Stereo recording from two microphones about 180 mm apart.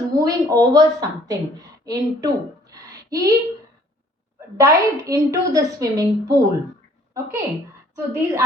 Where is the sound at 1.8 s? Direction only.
20° right (ahead or behind).